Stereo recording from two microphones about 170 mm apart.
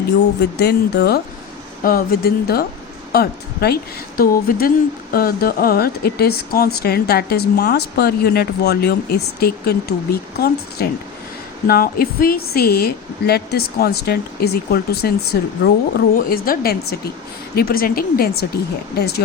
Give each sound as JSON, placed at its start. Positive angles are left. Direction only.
{"t": 0.6, "sound": "speech", "side_deg": 70}
{"t": 1.8, "sound": "speech", "side_deg": 60}